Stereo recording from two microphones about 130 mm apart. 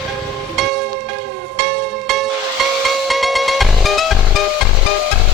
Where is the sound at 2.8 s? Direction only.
Centre (ahead or behind).